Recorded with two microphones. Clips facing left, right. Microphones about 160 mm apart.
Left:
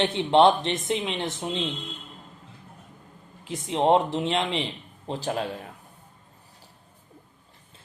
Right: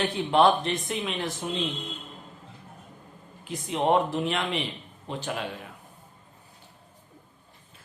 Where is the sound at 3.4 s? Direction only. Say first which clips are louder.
Left 3 dB; 25° left (ahead or behind).